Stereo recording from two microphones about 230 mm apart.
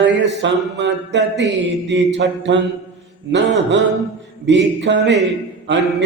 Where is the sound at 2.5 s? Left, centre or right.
Right.